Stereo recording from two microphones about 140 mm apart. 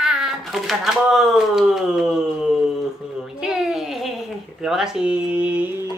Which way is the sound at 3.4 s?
5° right (ahead or behind).